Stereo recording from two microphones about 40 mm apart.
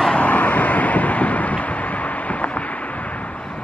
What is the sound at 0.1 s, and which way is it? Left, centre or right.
Vehicle, left.